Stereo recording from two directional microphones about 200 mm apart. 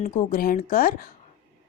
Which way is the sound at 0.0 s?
40° left (ahead or behind).